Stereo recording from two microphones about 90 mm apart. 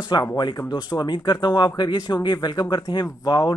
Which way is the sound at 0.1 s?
55° left (ahead or behind).